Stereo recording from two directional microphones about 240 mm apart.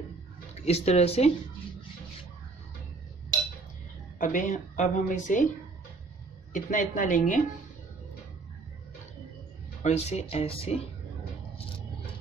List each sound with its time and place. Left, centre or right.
0.6 s speech: left
4.2 s a woman's voice: left
6.5 s a woman's voice: left
9.8 s speech: left